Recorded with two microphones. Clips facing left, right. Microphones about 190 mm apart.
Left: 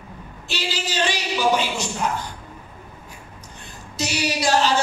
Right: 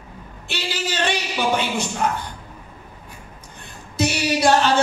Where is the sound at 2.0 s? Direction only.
55° right (ahead or behind).